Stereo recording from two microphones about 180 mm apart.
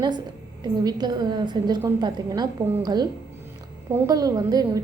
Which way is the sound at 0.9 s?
25° right (ahead or behind).